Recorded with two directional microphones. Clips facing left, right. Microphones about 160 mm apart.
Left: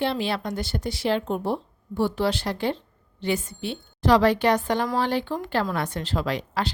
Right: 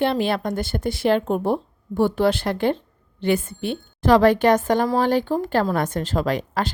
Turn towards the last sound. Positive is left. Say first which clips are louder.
# right 4 dB
turn(degrees=-50)  # may be behind; listen again after turning